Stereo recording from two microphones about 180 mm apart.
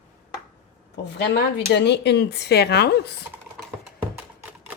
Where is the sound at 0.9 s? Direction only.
70° left (ahead or behind).